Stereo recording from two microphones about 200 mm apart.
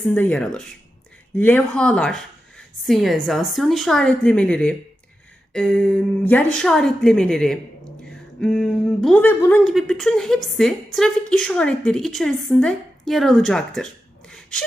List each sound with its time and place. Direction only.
0.1 s a woman's voice: 10° left (ahead or behind)
14.3 s gasp: 5° left (ahead or behind)